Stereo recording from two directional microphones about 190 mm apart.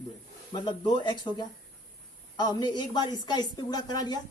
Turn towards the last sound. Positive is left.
turn(degrees=20)  # may be behind; listen again after turning